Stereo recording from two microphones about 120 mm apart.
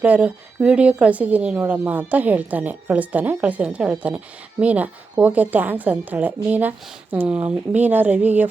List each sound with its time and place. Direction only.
0.0 s speech: 10° right (ahead or behind)